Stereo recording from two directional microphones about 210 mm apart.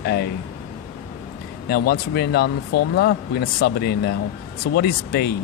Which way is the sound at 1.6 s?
50° left (ahead or behind).